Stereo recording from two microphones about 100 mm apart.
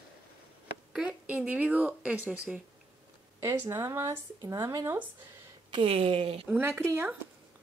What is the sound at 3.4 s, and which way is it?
Speech, 25° right (ahead or behind).